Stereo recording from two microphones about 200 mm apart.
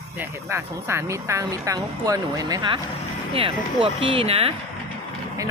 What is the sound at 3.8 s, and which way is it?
Speech, 25° right (ahead or behind).